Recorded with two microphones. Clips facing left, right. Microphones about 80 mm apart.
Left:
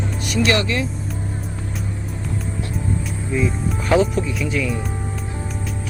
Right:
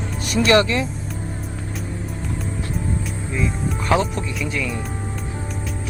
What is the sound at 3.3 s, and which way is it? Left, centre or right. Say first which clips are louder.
Speech: left 2 dB; centre.